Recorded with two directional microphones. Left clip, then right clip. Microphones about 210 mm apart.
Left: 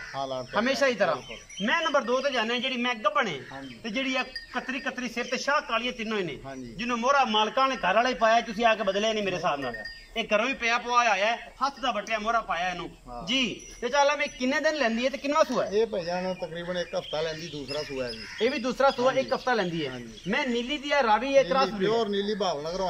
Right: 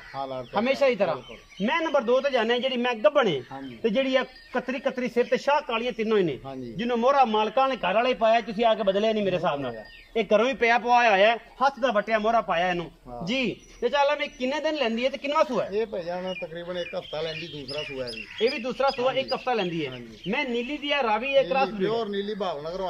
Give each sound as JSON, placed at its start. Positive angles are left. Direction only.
{"t": 0.6, "sound": "a man's voice", "side_deg": -15}
{"t": 13.3, "sound": "speech", "side_deg": -20}
{"t": 15.7, "sound": "speech", "side_deg": 0}